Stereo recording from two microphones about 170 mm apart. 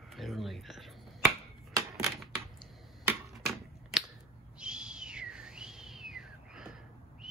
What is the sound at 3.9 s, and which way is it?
Scissors, centre (ahead or behind).